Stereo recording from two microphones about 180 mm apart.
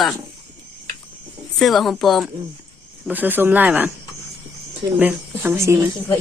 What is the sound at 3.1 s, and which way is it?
Speech, 10° right (ahead or behind).